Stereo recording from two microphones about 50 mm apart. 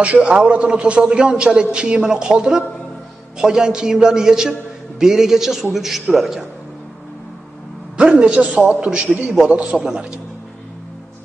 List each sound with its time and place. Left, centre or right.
0.0 s a man's voice: right; by 6.4 s centre
8.0 s a man's voice: right
9.3 s a man's voice: centre